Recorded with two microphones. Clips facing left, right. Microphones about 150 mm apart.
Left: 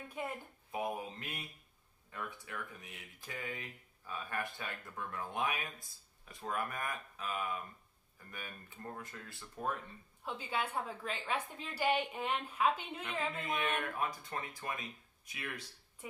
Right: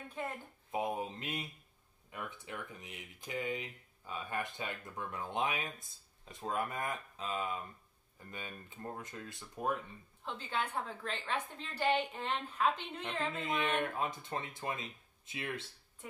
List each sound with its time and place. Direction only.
0.2 s a woman's voice: 10° left (ahead or behind)
0.7 s speech: 20° right (ahead or behind)
10.2 s a woman's voice: 10° left (ahead or behind)
13.7 s speech: 25° right (ahead or behind)